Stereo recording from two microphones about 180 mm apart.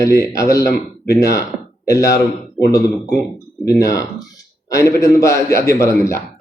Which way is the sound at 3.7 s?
15° left (ahead or behind).